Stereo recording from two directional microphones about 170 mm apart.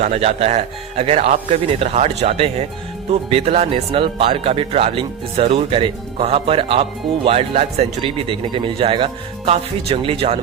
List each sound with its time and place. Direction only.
0.0 s speech: 40° right (ahead or behind)